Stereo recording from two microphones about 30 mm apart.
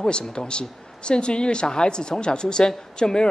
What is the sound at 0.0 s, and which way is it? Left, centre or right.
Speech, left.